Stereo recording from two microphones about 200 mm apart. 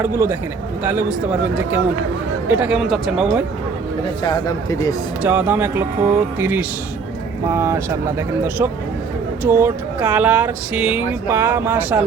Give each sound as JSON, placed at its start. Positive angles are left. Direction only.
{"t": 0.0, "sound": "speech", "side_deg": -10}
{"t": 4.2, "sound": "speech", "side_deg": 20}
{"t": 5.2, "sound": "speech", "side_deg": -10}